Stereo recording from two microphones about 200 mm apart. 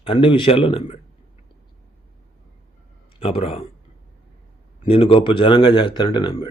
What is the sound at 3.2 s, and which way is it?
Speech, 30° left (ahead or behind).